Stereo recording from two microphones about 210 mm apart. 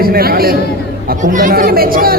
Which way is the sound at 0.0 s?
45° right (ahead or behind).